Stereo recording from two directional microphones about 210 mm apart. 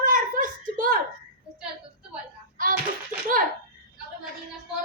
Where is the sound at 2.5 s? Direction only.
40° right (ahead or behind).